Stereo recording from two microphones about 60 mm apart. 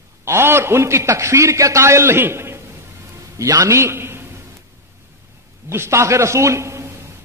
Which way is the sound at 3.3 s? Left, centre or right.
Right.